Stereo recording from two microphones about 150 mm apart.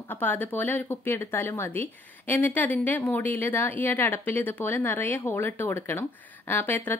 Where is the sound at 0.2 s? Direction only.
10° left (ahead or behind).